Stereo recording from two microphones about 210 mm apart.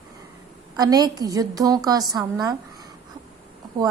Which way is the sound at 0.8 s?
20° right (ahead or behind).